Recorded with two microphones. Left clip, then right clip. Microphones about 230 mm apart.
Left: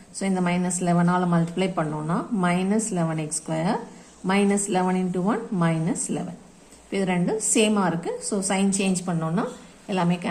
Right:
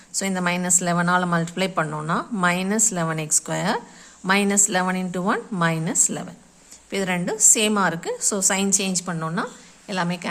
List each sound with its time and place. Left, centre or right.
0.1 s a woman's voice: right